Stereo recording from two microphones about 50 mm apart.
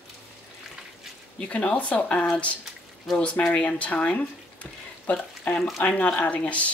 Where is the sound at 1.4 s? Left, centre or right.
Centre.